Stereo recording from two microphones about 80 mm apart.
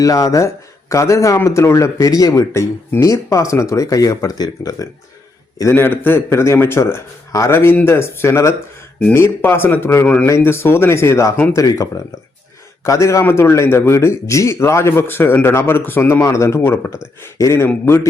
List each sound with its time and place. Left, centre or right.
0.0 s speech: left
5.7 s a man's voice: left
16.2 s a man's voice: left